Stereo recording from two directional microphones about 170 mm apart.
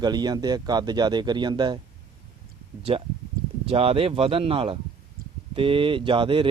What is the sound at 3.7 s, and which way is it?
Speech, 35° right (ahead or behind).